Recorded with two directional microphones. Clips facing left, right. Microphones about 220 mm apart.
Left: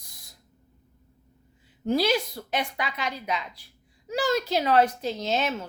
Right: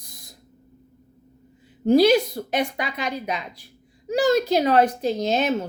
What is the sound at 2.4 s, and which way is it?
Speech, 40° right (ahead or behind).